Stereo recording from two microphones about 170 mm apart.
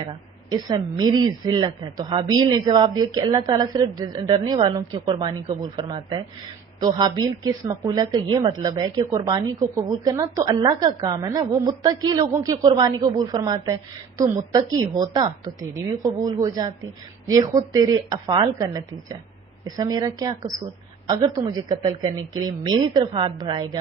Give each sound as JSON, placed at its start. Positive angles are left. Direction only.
{"t": 0.0, "sound": "speech", "side_deg": -25}